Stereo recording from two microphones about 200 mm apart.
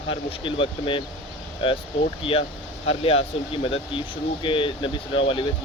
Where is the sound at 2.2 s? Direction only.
25° left (ahead or behind).